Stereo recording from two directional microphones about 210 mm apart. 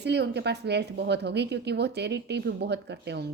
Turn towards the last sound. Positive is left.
turn(degrees=-55)  # may be behind; listen again after turning